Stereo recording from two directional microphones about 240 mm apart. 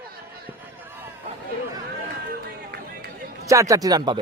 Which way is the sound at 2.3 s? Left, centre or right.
Right.